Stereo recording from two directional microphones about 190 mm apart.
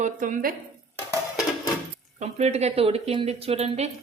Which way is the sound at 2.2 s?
35° right (ahead or behind).